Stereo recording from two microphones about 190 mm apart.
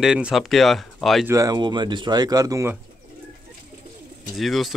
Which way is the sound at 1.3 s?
20° right (ahead or behind).